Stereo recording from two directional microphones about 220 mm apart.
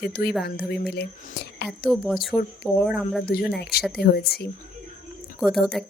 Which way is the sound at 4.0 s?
45° left (ahead or behind).